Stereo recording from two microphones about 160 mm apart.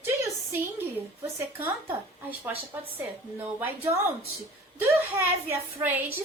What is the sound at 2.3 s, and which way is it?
A woman's voice, 10° right (ahead or behind).